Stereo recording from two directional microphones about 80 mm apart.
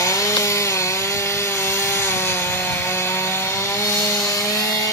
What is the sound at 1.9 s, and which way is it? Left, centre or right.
Wood, left.